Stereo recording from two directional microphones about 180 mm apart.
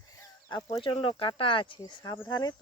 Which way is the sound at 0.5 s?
30° left (ahead or behind).